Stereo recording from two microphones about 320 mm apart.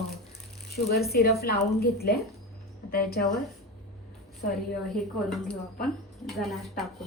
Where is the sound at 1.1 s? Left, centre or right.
Left.